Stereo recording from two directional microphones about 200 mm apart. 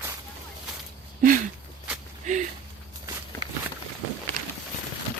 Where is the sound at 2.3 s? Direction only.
35° right (ahead or behind).